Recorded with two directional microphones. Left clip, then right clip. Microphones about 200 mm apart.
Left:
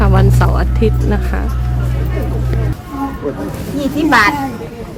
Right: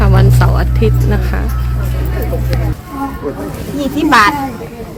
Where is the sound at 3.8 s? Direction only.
45° right (ahead or behind).